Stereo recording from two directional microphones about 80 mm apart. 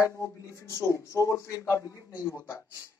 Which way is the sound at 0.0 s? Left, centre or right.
Left.